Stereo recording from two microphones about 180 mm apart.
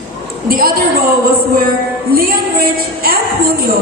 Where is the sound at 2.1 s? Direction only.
55° right (ahead or behind).